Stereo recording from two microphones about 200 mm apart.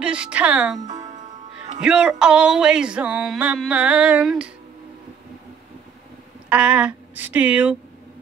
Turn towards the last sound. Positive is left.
turn(degrees=-5)  # may be behind; listen again after turning